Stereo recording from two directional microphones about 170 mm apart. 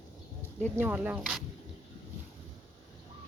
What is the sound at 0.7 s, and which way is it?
Speech, 10° right (ahead or behind).